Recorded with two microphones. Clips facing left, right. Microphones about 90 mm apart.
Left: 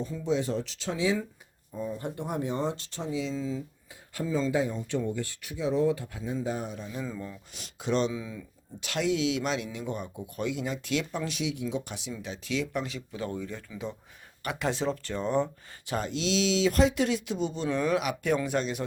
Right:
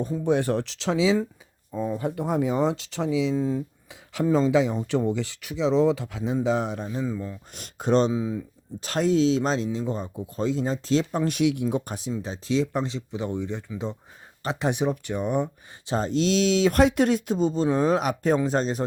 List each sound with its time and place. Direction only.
0.3 s speech: 60° right (ahead or behind)
4.1 s speech: 80° right
7.5 s speech: 45° right (ahead or behind)
8.1 s speech: 30° right (ahead or behind)
8.8 s speech: 40° right (ahead or behind)
11.3 s speech: 60° right (ahead or behind); by 15.4 s 10° right (ahead or behind)
15.9 s speech: 35° right (ahead or behind)